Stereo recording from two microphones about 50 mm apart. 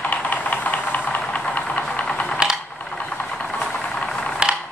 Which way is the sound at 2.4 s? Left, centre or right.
Centre.